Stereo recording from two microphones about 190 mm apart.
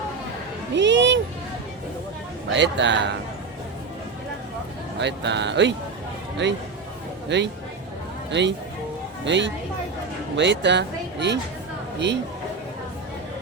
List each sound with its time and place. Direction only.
0.8 s children playing: 75° right (ahead or behind)
2.5 s speech: 70° right (ahead or behind)
4.9 s speech: 65° right (ahead or behind)